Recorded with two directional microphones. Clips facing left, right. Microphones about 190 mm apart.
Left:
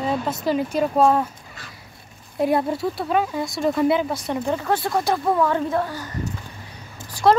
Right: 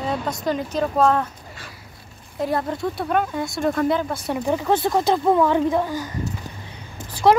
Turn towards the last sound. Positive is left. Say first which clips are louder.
# right 1 dB
turn(degrees=-15)  # may be behind; listen again after turning